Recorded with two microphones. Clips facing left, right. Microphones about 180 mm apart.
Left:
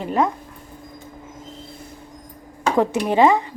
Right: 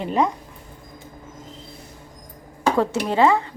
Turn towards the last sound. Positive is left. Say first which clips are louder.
# left 2 dB
turn(degrees=15)  # may be behind; listen again after turning